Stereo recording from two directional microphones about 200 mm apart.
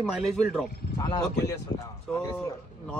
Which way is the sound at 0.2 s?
Centre (ahead or behind).